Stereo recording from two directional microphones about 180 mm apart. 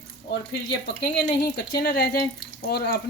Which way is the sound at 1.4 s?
65° left (ahead or behind).